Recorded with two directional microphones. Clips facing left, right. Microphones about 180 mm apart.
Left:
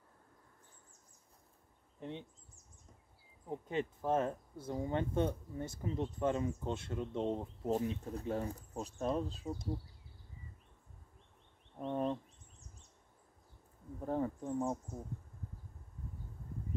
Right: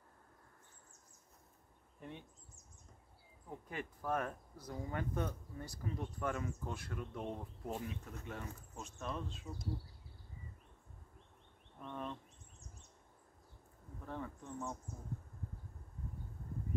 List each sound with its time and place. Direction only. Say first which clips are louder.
2.0 s speech: left 6 dB; 20° left (ahead or behind)
3.4 s speech: left 8 dB; 25° left (ahead or behind)
11.8 s a sound: left 9 dB; 40° left (ahead or behind)
14.0 s bee: left 10 dB; 40° left (ahead or behind)